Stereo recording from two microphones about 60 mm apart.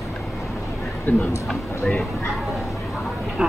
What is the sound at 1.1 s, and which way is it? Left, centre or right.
Speech, left.